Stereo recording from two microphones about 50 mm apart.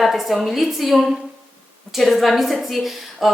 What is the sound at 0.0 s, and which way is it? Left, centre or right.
A woman's voice, centre.